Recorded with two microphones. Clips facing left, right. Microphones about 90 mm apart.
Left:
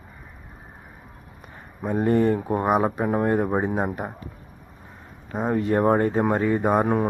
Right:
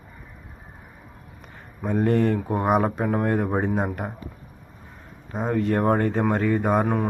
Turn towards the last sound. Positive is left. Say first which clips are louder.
# left 2 dB
turn(degrees=25)  # may be behind; listen again after turning